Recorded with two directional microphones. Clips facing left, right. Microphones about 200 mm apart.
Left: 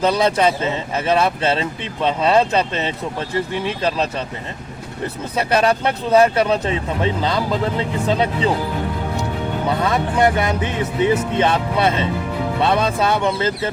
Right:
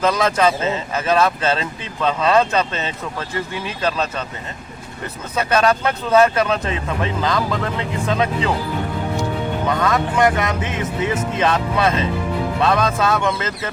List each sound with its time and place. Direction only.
0.0 s speech: 30° left (ahead or behind)
5.4 s speech: 30° left (ahead or behind)
9.6 s speech: 30° left (ahead or behind)